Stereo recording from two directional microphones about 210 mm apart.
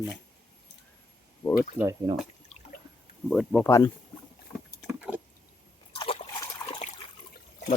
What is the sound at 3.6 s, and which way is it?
Speech, 15° left (ahead or behind).